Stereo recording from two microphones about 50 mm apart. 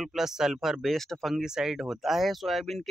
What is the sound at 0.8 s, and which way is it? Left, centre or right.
Speech, centre.